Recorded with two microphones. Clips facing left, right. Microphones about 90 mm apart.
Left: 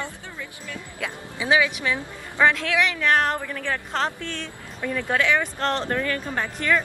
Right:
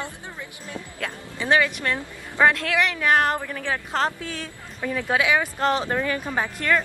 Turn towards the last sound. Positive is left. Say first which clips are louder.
# right 1 dB
turn(degrees=-10)  # may be behind; listen again after turning